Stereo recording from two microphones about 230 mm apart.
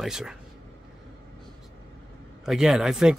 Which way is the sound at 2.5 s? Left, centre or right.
Centre.